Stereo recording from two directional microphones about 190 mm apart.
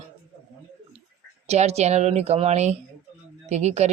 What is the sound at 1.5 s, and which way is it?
Speech, 35° right (ahead or behind).